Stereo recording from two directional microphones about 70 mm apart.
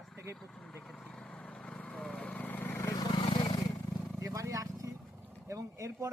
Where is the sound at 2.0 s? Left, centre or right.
Centre.